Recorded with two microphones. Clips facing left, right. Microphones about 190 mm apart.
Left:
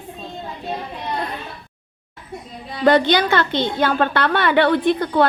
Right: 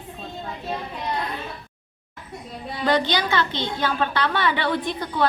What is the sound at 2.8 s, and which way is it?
A woman's voice, 55° left (ahead or behind).